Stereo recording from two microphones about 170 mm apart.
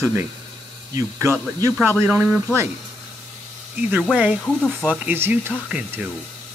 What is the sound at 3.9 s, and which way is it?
Speech, 5° right (ahead or behind).